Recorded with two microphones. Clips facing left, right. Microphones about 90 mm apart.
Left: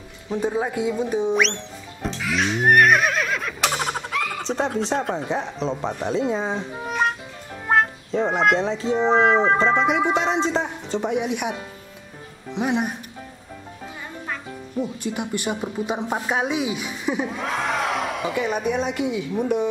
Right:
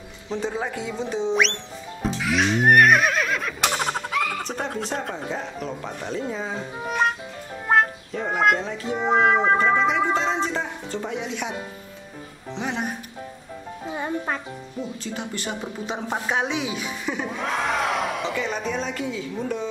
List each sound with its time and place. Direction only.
0.3 s a woman's voice: 10° left (ahead or behind)
1.3 s music: centre (ahead or behind)
4.6 s speech: 20° left (ahead or behind)
6.8 s music: centre (ahead or behind)
8.3 s a sound: 5° right (ahead or behind)
9.1 s music: 5° right (ahead or behind)
9.8 s speech: 15° left (ahead or behind)
12.5 s a woman's voice: 15° left (ahead or behind)
13.9 s music: 45° right (ahead or behind)
14.8 s a woman's voice: 10° left (ahead or behind)